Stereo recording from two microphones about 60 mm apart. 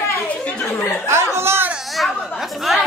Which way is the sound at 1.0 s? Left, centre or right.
Right.